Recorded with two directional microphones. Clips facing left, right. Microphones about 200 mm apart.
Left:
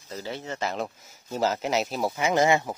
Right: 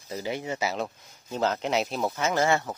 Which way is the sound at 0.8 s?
5° left (ahead or behind).